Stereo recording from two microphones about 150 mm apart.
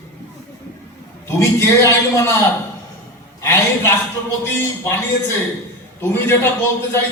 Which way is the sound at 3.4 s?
15° left (ahead or behind).